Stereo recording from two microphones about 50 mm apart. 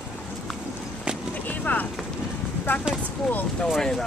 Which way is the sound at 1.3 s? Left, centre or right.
Left.